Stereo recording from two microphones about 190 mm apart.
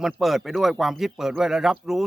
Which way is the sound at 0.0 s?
Centre (ahead or behind).